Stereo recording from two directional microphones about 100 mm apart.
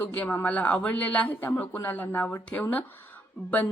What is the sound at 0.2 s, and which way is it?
Speech, 20° left (ahead or behind).